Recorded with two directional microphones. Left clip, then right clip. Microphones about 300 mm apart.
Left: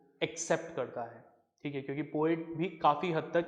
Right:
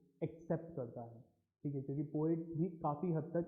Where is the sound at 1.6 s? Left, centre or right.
Left.